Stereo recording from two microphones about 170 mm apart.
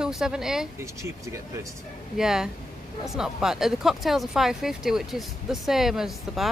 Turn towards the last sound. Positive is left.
turn(degrees=0)  # may be behind; listen again after turning